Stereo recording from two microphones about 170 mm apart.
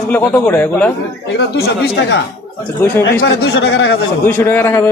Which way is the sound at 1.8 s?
75° left (ahead or behind).